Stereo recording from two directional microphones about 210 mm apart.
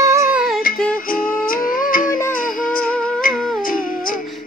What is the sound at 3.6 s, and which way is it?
Humming, 40° left (ahead or behind).